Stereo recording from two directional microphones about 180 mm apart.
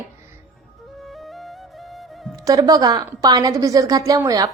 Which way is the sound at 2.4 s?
20° right (ahead or behind).